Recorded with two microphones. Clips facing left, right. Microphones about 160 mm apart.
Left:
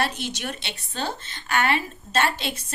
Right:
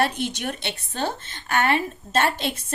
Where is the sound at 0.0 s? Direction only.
55° right (ahead or behind).